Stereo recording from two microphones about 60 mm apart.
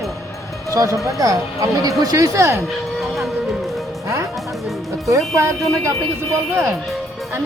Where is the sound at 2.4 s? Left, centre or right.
Right.